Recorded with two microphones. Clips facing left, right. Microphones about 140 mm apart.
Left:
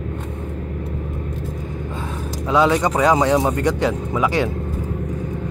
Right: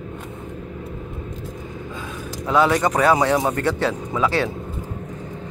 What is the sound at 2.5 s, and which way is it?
Speech, 15° left (ahead or behind).